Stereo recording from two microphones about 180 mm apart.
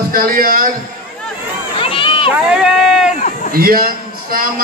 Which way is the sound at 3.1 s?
40° left (ahead or behind).